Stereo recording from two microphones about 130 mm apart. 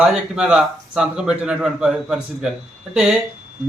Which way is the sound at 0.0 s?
5° right (ahead or behind).